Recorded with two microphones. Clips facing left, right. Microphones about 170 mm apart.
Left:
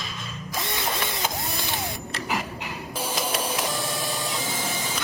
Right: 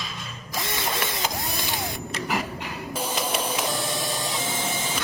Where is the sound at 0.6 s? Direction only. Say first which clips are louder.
Right 1 dB; 20° left (ahead or behind).